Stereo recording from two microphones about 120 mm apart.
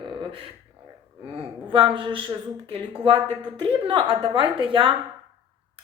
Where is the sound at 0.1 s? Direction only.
45° right (ahead or behind).